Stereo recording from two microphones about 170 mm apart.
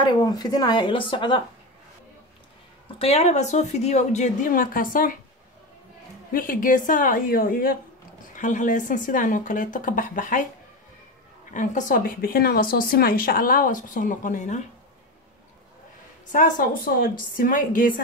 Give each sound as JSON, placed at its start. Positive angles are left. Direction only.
{"t": 0.0, "sound": "speech", "side_deg": 25}
{"t": 3.0, "sound": "speech", "side_deg": 35}
{"t": 6.3, "sound": "speech", "side_deg": 55}
{"t": 11.5, "sound": "speech", "side_deg": 45}
{"t": 16.3, "sound": "speech", "side_deg": 50}